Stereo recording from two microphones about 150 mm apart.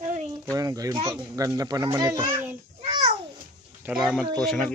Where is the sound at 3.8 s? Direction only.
5° right (ahead or behind).